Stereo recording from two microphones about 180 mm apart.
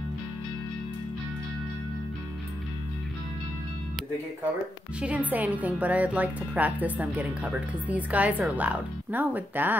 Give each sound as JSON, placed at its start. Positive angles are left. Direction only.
{"t": 5.0, "sound": "a woman's voice", "side_deg": -10}